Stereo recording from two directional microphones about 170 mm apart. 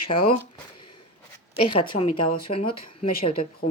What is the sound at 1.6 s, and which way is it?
Speech, 30° left (ahead or behind).